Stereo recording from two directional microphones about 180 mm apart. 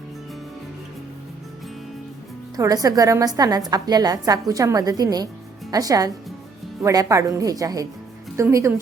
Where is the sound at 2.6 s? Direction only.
20° right (ahead or behind).